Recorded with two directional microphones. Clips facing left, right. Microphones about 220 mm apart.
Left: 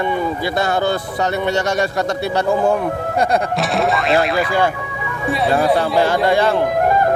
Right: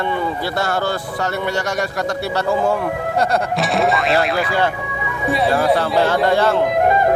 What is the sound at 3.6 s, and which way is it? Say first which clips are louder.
Speech: even; centre (ahead or behind).